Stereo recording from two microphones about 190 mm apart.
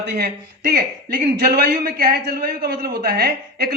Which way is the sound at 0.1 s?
55° right (ahead or behind).